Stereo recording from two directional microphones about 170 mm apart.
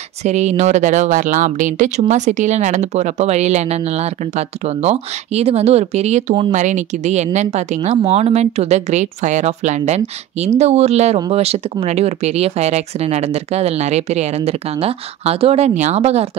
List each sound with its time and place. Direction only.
0.2 s speech: 40° right (ahead or behind)